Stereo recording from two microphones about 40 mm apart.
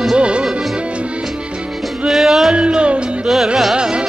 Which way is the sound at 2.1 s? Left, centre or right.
Centre.